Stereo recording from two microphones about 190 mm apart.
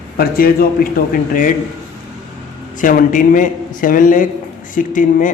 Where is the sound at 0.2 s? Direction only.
50° left (ahead or behind).